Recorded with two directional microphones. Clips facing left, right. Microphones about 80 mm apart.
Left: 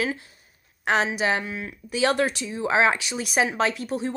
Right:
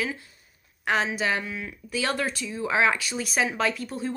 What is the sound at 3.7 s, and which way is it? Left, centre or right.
Speech, left.